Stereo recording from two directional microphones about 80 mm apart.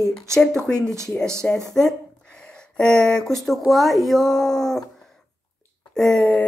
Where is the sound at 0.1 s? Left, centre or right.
Centre.